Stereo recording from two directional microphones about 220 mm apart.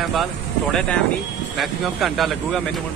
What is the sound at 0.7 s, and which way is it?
Speech, 5° left (ahead or behind).